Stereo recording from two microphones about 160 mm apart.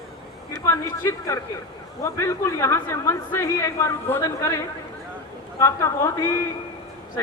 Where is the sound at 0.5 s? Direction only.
15° left (ahead or behind).